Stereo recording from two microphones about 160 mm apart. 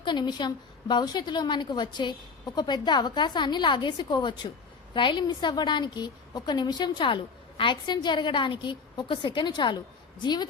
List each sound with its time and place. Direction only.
0.0 s a woman's voice: 30° left (ahead or behind)